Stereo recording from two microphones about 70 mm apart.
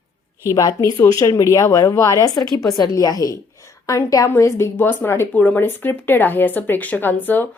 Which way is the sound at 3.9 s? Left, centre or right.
Left.